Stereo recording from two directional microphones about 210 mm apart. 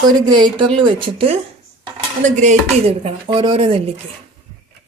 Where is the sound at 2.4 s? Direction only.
30° right (ahead or behind).